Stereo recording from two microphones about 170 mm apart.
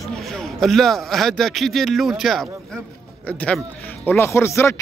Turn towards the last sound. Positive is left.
turn(degrees=15)  # may be behind; listen again after turning